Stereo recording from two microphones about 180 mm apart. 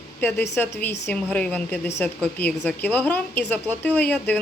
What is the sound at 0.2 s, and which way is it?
A woman's voice, 10° left (ahead or behind).